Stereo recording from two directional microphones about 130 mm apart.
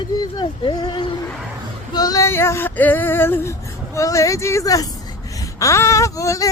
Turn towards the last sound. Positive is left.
turn(degrees=25)  # may be behind; listen again after turning